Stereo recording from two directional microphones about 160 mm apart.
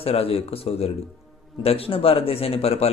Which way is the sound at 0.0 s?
35° left (ahead or behind).